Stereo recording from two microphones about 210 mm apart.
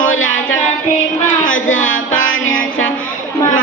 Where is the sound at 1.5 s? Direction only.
70° left (ahead or behind).